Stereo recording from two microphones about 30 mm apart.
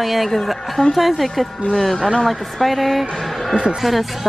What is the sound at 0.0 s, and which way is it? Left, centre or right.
Speech, centre.